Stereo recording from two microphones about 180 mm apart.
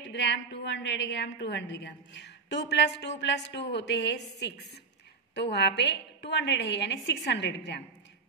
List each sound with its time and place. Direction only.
0.1 s a woman's voice: 75° left (ahead or behind)